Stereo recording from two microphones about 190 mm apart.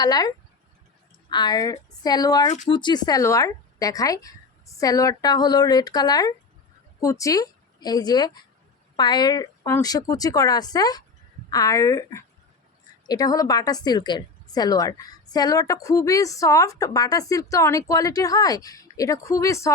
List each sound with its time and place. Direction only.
0.0 s a woman's voice: 20° left (ahead or behind)